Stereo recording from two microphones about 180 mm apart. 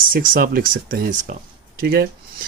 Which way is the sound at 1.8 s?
60° right (ahead or behind).